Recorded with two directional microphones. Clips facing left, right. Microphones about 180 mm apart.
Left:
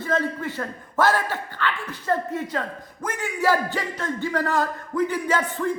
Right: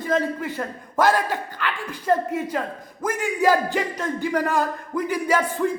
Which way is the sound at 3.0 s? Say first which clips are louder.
Right 3 dB; 15° right (ahead or behind).